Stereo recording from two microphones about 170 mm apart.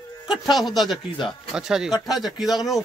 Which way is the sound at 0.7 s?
Centre (ahead or behind).